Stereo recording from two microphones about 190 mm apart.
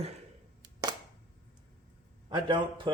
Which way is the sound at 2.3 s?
25° right (ahead or behind).